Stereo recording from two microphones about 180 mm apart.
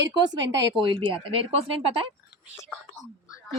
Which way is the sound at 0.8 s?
25° right (ahead or behind).